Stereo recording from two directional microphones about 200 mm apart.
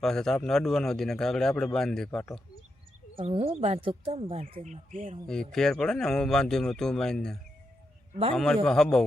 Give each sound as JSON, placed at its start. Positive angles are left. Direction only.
{"t": 0.0, "sound": "a man's voice", "side_deg": 5}
{"t": 3.2, "sound": "speech", "side_deg": -30}
{"t": 5.3, "sound": "a man's voice", "side_deg": 5}
{"t": 8.1, "sound": "a man's voice", "side_deg": -30}
{"t": 8.6, "sound": "a man's voice", "side_deg": 0}